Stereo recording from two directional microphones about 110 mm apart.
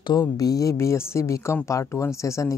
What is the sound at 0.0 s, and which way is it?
Speech, 40° left (ahead or behind).